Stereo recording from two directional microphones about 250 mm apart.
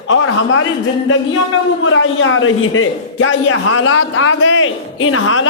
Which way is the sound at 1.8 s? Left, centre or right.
Left.